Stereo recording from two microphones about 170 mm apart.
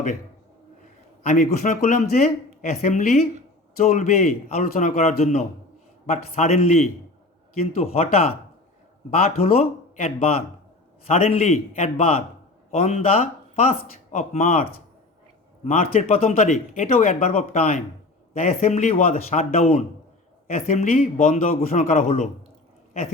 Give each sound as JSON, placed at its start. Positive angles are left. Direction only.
{"t": 1.3, "sound": "speech", "side_deg": 45}